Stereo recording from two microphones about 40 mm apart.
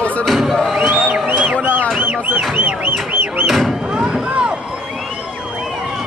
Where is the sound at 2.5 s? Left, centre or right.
Right.